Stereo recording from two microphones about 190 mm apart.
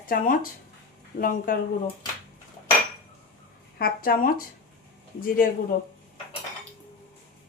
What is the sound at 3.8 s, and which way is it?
Speech, 50° left (ahead or behind).